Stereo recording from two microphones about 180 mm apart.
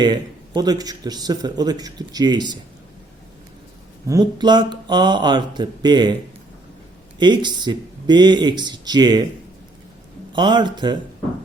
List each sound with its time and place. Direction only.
0.0 s speech: 25° right (ahead or behind)
4.0 s speech: 20° right (ahead or behind)
7.2 s speech: 25° right (ahead or behind)
10.3 s speech: 25° right (ahead or behind)